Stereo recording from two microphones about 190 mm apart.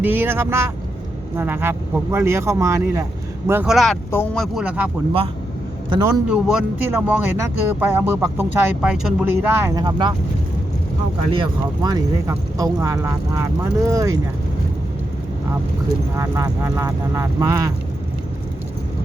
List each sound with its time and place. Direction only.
0.0 s speech: 10° right (ahead or behind)
4.1 s speech: 10° left (ahead or behind)
4.5 s speech: 5° right (ahead or behind)
5.9 s a man's voice: 20° right (ahead or behind)
6.2 s speech: 5° right (ahead or behind); by 10.1 s 20° right (ahead or behind)
11.3 s speech: 25° right (ahead or behind)
16.1 s speech: 15° right (ahead or behind)